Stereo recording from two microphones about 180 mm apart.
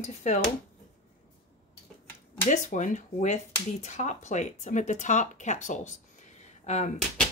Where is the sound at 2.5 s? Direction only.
45° left (ahead or behind).